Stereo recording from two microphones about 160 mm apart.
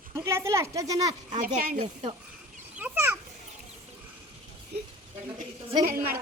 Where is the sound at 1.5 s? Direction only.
65° right (ahead or behind).